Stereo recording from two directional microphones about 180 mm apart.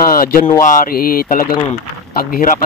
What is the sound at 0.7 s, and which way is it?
Speech, 55° left (ahead or behind).